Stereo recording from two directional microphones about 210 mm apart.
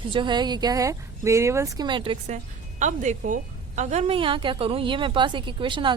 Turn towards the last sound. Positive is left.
turn(degrees=-25)  # may be behind; listen again after turning